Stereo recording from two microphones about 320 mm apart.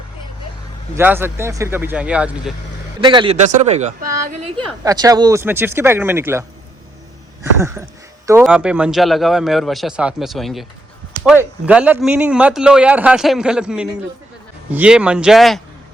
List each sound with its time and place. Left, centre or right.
0.9 s speech: centre
3.0 s speech: centre
7.6 s speech: centre